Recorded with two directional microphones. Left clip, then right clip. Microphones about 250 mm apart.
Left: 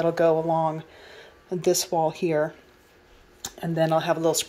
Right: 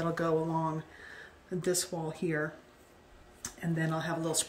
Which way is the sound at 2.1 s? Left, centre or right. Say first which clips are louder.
Left 10 dB; left.